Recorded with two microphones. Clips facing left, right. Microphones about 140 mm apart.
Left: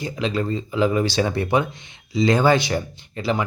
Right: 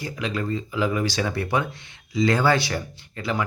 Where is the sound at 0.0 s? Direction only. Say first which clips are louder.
Left 4 dB; 25° left (ahead or behind).